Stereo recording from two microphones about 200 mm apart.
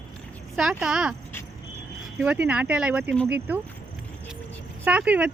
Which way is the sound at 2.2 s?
5° right (ahead or behind).